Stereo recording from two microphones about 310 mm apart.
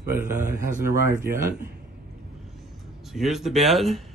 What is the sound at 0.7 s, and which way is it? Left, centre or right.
Speech, right.